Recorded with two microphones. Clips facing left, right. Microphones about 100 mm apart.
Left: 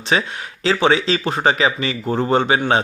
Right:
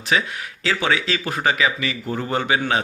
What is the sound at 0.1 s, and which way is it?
Speech, 30° left (ahead or behind).